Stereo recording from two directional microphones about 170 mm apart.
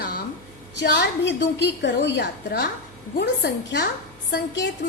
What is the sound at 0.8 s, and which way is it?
A woman's voice, 90° left.